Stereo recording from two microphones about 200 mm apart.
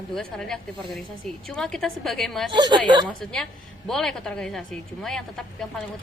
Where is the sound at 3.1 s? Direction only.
5° left (ahead or behind).